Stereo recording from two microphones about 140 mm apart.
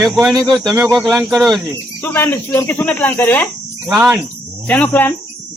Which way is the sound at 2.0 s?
15° left (ahead or behind).